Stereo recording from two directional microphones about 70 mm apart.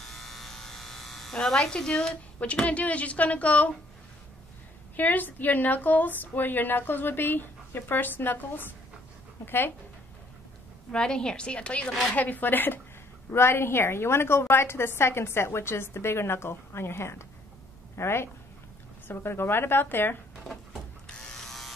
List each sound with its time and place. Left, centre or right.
0.0 s electric shaver: centre; by 3.7 s left
4.9 s a woman's voice: left
10.9 s a woman's voice: centre; by 20.2 s left
21.2 s electric toothbrush: centre